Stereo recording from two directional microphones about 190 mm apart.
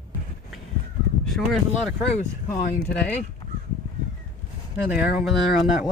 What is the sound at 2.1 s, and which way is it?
Speech, 45° left (ahead or behind).